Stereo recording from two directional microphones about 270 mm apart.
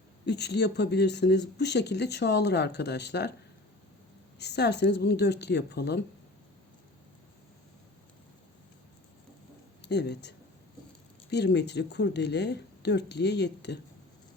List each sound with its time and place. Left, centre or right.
0.3 s speech: left
4.4 s speech: left
9.9 s speech: left